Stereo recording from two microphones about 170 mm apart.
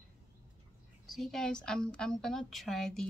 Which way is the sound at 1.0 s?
Centre (ahead or behind).